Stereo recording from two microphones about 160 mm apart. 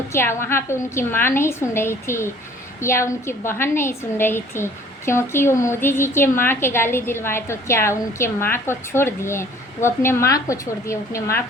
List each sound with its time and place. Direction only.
0.1 s a woman's voice: 15° left (ahead or behind)